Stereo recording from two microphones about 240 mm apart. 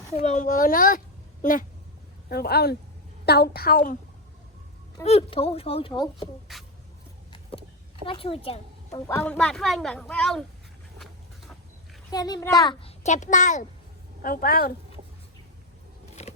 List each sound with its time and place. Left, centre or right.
0.2 s a woman's voice: left
5.0 s speech: left
6.5 s speech: centre
8.0 s a woman's voice: left
9.0 s speech: centre
10.9 s dog: centre
12.1 s a child's voice: centre
13.0 s a woman's voice: left
16.2 s scissors: left